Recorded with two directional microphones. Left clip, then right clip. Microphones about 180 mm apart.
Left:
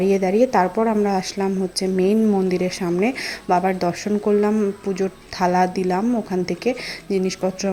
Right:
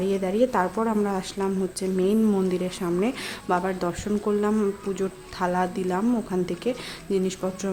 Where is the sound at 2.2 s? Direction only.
5° left (ahead or behind).